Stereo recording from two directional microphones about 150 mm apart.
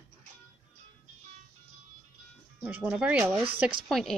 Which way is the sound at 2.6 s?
10° right (ahead or behind).